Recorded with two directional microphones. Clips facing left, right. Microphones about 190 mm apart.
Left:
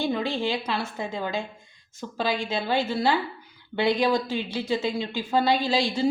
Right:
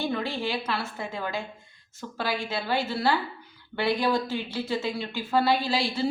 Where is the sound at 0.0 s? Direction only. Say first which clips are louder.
Left 3 dB; 15° left (ahead or behind).